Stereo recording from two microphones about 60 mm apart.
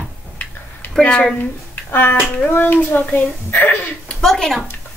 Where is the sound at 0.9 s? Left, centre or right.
Centre.